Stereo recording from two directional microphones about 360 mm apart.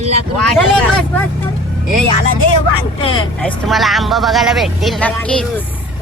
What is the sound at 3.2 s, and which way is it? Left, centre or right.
Speech, centre.